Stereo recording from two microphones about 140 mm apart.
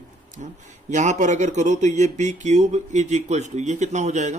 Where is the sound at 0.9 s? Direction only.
60° right (ahead or behind).